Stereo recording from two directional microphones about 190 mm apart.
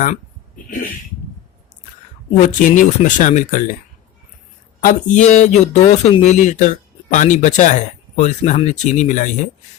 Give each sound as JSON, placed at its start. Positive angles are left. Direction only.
{"t": 2.6, "sound": "speech", "side_deg": 45}
{"t": 4.8, "sound": "speech", "side_deg": 40}